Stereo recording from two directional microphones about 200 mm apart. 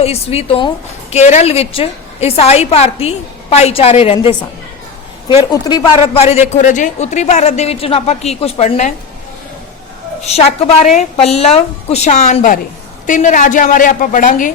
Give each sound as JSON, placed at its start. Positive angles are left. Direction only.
{"t": 0.0, "sound": "speech", "side_deg": 30}
{"t": 5.4, "sound": "speech", "side_deg": 20}
{"t": 10.2, "sound": "speech", "side_deg": 30}